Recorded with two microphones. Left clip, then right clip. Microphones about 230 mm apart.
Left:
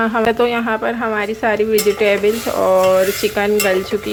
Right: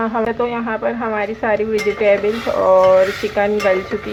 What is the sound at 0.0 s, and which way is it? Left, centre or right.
Speech, left.